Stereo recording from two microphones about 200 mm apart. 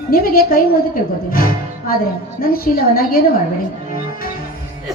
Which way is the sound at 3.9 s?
45° left (ahead or behind).